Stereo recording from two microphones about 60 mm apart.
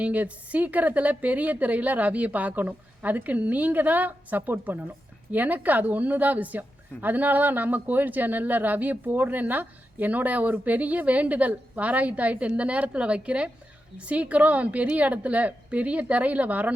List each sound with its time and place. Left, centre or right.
0.0 s a woman's voice: right